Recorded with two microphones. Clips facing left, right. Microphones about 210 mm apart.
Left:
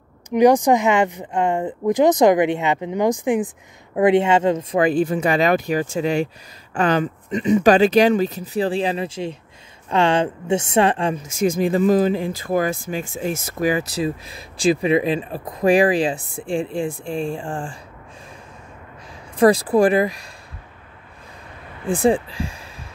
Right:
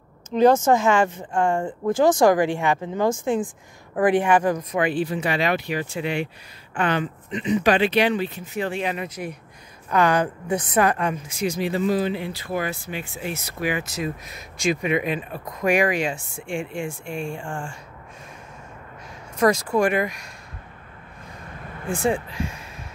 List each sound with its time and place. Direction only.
0.3 s a woman's voice: 15° left (ahead or behind)
11.2 s speech: 50° left (ahead or behind); by 17.7 s 35° left (ahead or behind)
19.3 s speech: 30° left (ahead or behind)
21.8 s speech: 35° left (ahead or behind)